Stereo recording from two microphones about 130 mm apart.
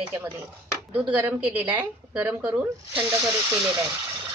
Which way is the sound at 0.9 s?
10° right (ahead or behind).